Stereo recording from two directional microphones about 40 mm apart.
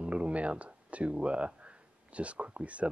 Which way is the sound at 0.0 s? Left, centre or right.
Right.